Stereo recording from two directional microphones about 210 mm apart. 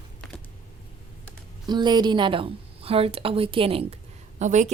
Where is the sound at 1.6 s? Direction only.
20° right (ahead or behind).